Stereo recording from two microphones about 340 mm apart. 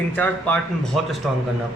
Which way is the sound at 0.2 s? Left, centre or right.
Centre.